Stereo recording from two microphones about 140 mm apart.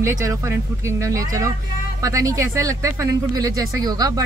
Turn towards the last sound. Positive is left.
turn(degrees=-30)  # may be behind; listen again after turning